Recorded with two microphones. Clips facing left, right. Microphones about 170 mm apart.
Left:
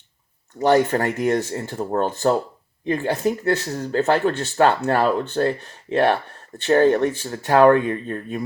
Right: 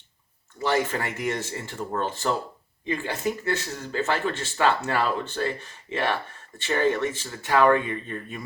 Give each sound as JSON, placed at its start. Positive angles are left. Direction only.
{"t": 0.7, "sound": "speech", "side_deg": 60}
{"t": 1.8, "sound": "speech", "side_deg": 40}
{"t": 2.8, "sound": "speech", "side_deg": 55}
{"t": 3.2, "sound": "speech", "side_deg": 35}
{"t": 4.1, "sound": "speech", "side_deg": 55}